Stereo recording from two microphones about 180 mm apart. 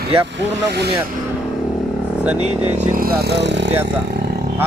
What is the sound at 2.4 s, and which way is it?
Speech, 40° right (ahead or behind).